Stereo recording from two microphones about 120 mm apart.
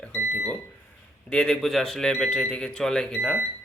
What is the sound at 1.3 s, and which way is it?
Speech, 5° left (ahead or behind).